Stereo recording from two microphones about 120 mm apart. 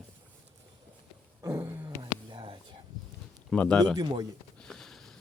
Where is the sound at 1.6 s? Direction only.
20° right (ahead or behind).